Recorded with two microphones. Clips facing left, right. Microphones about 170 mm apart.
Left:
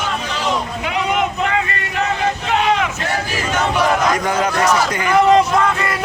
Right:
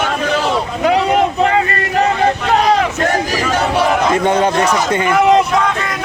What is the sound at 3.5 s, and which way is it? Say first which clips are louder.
Speech: right 1 dB; 30° right (ahead or behind).